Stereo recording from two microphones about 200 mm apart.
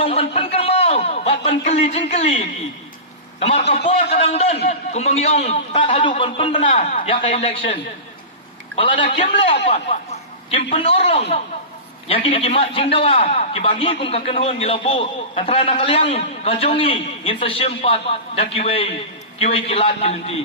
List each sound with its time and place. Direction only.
0.0 s a man's voice: 30° left (ahead or behind)
3.7 s a man's voice: 30° left (ahead or behind)
6.7 s a man's voice: 40° left (ahead or behind)